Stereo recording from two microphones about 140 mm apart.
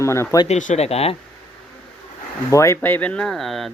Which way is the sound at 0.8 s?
45° left (ahead or behind).